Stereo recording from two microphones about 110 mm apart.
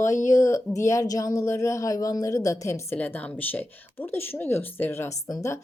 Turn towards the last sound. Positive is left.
turn(degrees=30)  # may be behind; listen again after turning